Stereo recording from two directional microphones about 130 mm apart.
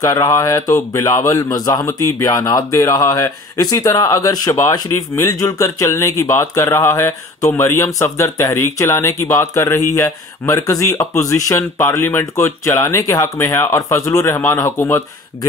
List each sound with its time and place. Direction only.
0.0 s speech: 25° left (ahead or behind)